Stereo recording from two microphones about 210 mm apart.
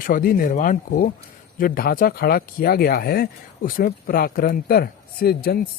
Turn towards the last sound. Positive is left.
turn(degrees=50)  # may be behind; listen again after turning